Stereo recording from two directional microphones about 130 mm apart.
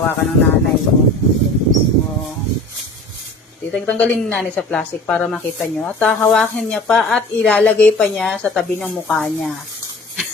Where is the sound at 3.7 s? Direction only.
10° left (ahead or behind).